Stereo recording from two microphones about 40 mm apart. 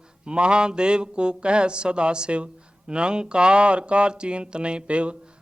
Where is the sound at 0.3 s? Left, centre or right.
Right.